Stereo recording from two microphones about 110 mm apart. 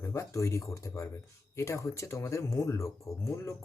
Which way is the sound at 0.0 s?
25° left (ahead or behind).